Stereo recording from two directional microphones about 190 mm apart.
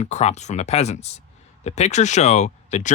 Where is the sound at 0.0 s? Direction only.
35° left (ahead or behind).